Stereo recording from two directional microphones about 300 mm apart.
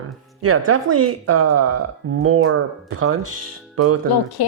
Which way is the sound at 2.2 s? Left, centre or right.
Right.